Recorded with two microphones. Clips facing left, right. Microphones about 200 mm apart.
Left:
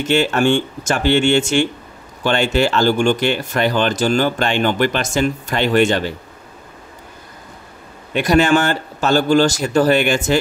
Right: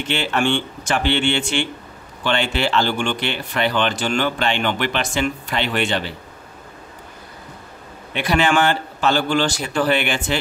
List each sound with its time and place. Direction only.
0.0 s speech: 45° left (ahead or behind)
8.1 s speech: 45° left (ahead or behind)